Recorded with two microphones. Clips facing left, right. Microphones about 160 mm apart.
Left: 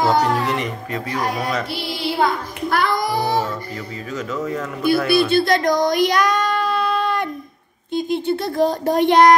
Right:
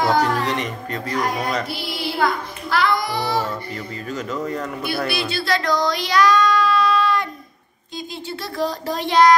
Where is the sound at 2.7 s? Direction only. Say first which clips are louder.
Left 1 dB; 50° left (ahead or behind).